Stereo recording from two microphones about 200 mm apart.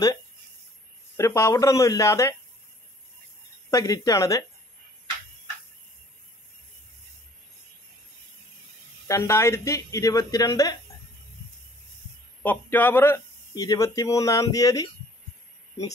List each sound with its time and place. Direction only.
1.1 s speech: 15° left (ahead or behind)
3.7 s speech: 20° left (ahead or behind)
9.0 s speech: 15° left (ahead or behind)
12.4 s speech: 10° left (ahead or behind)